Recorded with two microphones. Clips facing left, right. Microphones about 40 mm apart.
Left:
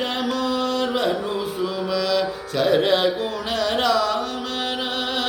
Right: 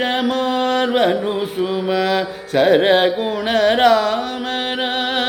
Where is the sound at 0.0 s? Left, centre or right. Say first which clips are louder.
Right 5 dB; right.